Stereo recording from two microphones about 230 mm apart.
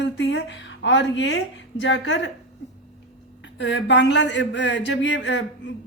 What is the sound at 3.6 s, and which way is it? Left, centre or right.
Speech, left.